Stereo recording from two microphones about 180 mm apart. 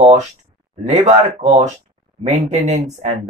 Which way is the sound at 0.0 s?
40° right (ahead or behind).